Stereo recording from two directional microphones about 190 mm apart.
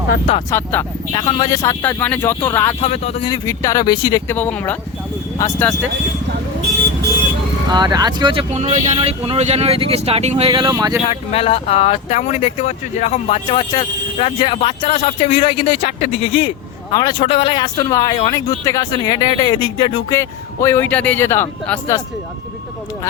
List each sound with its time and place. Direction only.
0.5 s speech: 10° left (ahead or behind)
2.8 s speech: 35° left (ahead or behind)
3.3 s speech: 15° left (ahead or behind)
7.7 s speech: 20° right (ahead or behind)
11.0 s speech: 30° left (ahead or behind)
16.9 s speech: 20° left (ahead or behind)
20.1 s speech: 15° left (ahead or behind)